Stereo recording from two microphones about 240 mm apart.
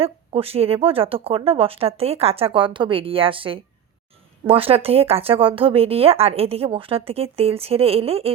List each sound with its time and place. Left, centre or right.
0.0 s speech: right